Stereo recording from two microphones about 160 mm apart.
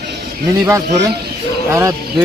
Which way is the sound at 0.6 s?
20° right (ahead or behind).